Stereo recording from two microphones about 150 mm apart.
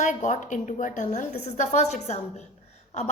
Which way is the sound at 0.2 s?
55° left (ahead or behind).